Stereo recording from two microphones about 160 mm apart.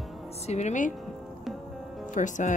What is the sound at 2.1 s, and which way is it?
Speech, 50° left (ahead or behind).